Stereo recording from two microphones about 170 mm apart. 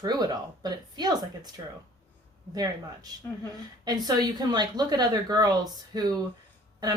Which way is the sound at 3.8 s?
25° right (ahead or behind).